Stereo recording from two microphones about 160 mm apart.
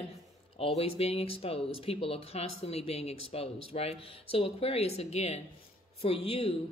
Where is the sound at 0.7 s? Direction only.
40° left (ahead or behind).